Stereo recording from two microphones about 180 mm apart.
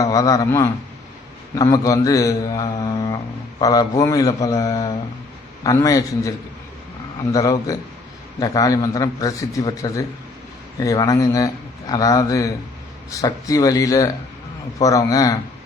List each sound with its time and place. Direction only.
0.0 s a man's voice: 20° left (ahead or behind)
7.3 s a man's voice: 20° left (ahead or behind)